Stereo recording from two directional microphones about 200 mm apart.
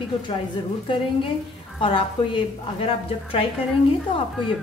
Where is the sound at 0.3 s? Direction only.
25° left (ahead or behind).